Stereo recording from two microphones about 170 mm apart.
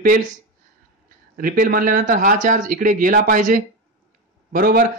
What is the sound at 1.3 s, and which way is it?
Speech, 55° right (ahead or behind).